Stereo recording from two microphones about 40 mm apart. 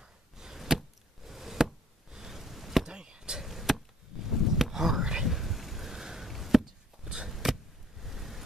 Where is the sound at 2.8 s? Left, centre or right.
Centre.